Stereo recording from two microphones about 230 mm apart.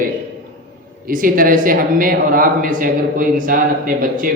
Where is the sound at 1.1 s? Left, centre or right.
Right.